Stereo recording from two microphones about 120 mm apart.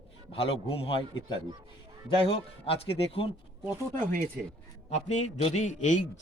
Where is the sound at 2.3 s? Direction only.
50° left (ahead or behind).